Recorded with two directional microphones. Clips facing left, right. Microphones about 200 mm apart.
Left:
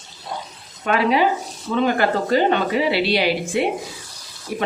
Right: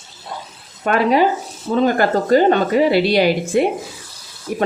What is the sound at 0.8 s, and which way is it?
A woman's voice, 45° right (ahead or behind).